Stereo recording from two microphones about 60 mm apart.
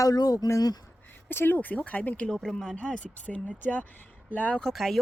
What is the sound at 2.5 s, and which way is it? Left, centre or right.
Speech, centre.